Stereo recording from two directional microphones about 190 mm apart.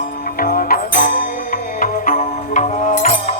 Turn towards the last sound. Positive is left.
turn(degrees=40)  # may be behind; listen again after turning